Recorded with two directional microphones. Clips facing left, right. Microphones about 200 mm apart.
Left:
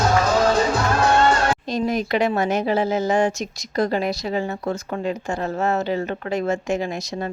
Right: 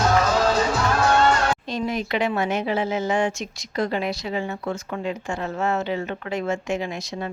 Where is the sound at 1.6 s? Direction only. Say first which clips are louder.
Left 4 dB; 40° left (ahead or behind).